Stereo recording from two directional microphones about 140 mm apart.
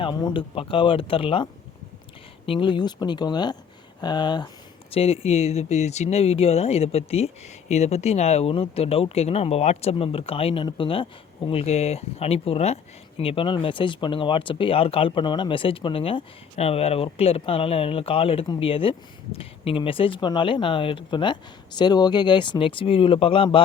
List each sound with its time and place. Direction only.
0.0 s speech: 30° left (ahead or behind)
2.5 s speech: 35° left (ahead or behind)
4.9 s speech: 45° left (ahead or behind)